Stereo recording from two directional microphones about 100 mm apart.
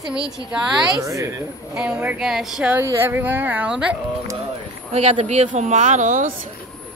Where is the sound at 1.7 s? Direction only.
10° right (ahead or behind).